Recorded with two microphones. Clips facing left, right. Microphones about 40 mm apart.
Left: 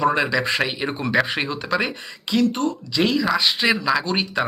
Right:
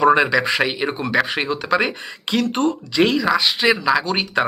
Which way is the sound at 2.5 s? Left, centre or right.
Right.